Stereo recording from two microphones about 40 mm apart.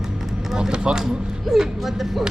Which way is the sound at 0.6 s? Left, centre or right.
Right.